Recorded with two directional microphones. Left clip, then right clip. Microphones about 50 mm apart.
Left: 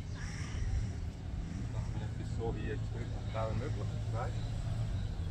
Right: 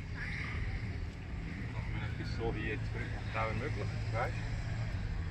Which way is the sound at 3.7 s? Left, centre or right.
Centre.